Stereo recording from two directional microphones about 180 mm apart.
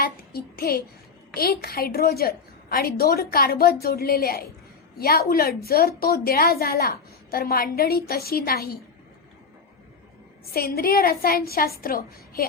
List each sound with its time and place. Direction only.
0.0 s a woman's voice: 55° left (ahead or behind)
10.5 s a woman's voice: 55° left (ahead or behind)